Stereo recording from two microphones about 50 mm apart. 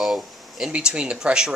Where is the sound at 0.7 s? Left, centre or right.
Right.